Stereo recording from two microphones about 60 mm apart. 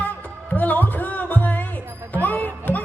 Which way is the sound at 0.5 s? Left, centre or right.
Left.